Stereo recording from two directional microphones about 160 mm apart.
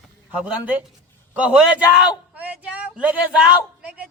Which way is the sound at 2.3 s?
10° right (ahead or behind).